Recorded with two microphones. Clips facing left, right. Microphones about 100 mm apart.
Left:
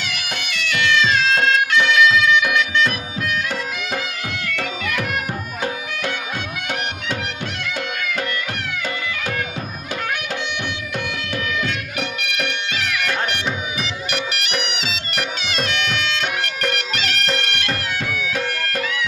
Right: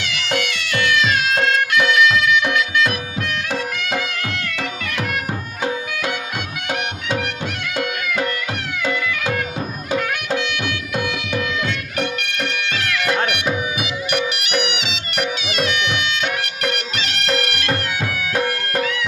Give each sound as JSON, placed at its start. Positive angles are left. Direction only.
{"t": 0.2, "sound": "music", "side_deg": -75}
{"t": 1.0, "sound": "music", "side_deg": -10}
{"t": 10.9, "sound": "music", "side_deg": -10}
{"t": 14.1, "sound": "music", "side_deg": 0}
{"t": 14.8, "sound": "music", "side_deg": 40}